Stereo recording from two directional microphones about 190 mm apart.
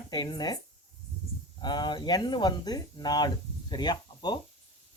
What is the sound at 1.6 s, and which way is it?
Speech, 25° left (ahead or behind).